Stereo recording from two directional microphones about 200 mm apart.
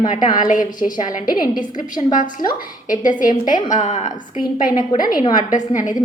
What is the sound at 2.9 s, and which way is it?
A woman's voice, 40° left (ahead or behind).